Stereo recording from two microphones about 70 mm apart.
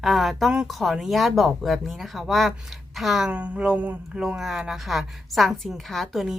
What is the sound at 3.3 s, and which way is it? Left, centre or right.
Speech, centre.